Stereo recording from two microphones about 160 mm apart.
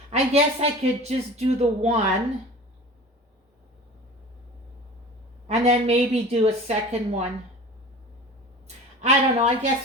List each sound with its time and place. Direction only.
0.1 s speech: 40° right (ahead or behind)
5.5 s speech: 40° right (ahead or behind)
8.6 s speech: 45° right (ahead or behind)